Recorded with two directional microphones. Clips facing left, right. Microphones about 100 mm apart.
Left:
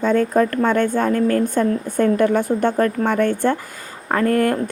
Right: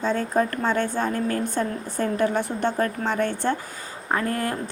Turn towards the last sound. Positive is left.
turn(degrees=-20)  # may be behind; listen again after turning